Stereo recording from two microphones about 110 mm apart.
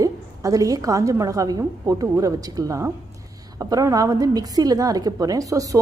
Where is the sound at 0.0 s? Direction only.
30° right (ahead or behind).